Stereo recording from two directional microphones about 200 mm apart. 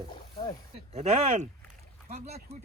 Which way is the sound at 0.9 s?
35° right (ahead or behind).